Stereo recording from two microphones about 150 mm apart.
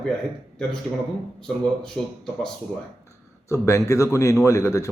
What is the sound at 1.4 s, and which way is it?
A man's voice, 5° left (ahead or behind).